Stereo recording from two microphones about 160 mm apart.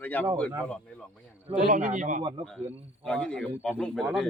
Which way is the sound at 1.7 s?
55° right (ahead or behind).